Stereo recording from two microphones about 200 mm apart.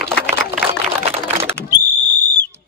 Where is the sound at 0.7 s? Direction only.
30° right (ahead or behind).